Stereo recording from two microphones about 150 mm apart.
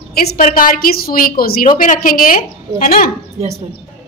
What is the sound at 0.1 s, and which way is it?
A woman's voice, 90° left.